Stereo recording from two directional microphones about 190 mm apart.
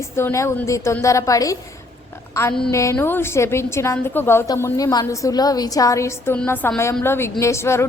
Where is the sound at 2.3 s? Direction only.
15° left (ahead or behind).